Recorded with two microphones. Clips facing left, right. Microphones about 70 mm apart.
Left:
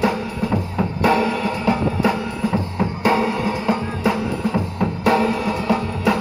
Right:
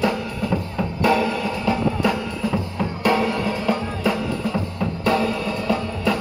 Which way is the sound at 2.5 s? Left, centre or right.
Left.